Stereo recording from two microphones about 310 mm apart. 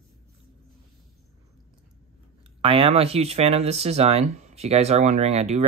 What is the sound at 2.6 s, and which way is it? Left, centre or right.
Speech, centre.